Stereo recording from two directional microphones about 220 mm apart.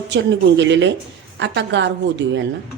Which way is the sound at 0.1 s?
55° right (ahead or behind).